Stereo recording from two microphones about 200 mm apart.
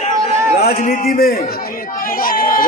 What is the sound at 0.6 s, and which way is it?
Speech, 40° left (ahead or behind).